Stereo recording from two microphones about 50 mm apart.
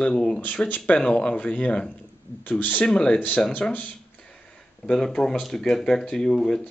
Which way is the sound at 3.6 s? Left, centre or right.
Left.